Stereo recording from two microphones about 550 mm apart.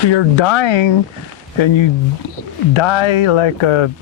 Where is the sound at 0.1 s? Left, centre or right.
Left.